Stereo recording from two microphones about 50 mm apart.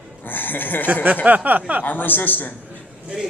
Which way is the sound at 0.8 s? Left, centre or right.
Right.